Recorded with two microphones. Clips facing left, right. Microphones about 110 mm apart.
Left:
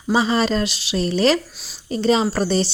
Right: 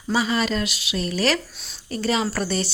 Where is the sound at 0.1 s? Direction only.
30° left (ahead or behind).